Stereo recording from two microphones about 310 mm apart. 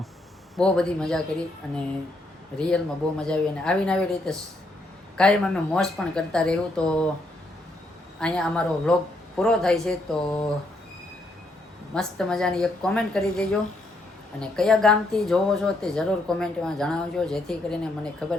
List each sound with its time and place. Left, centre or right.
0.5 s speech: centre
8.2 s speech: centre
11.9 s speech: centre